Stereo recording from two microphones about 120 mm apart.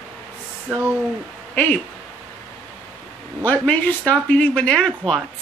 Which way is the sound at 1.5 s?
15° left (ahead or behind).